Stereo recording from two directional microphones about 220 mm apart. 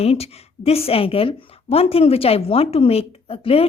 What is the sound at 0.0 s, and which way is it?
Speech, 30° left (ahead or behind).